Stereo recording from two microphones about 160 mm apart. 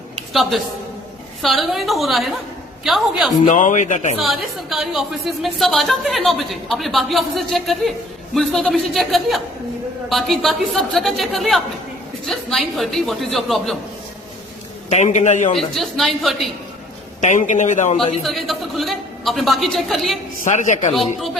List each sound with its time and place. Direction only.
1.4 s a woman's voice: centre (ahead or behind)
3.4 s a man's voice: 50° left (ahead or behind)
4.2 s a woman's voice: centre (ahead or behind)
14.8 s a man's voice: 45° left (ahead or behind)
15.5 s a woman's voice: centre (ahead or behind)
17.2 s a man's voice: 50° left (ahead or behind)
18.2 s a woman's voice: centre (ahead or behind)
20.4 s a man's voice: 50° left (ahead or behind)